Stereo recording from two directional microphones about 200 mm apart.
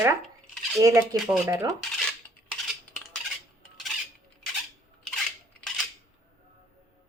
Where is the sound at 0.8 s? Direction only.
15° right (ahead or behind).